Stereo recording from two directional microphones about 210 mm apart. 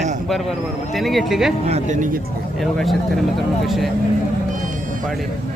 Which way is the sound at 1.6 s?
30° right (ahead or behind).